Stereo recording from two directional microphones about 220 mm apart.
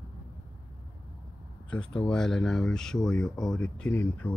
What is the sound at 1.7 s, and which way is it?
Speech, 5° left (ahead or behind).